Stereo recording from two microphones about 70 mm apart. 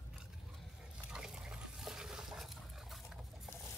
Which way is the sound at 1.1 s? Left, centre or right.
Centre.